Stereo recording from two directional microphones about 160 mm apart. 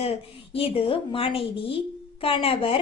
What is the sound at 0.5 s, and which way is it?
A woman's voice, 35° left (ahead or behind).